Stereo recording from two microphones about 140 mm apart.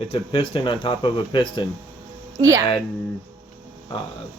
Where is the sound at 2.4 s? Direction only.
20° right (ahead or behind).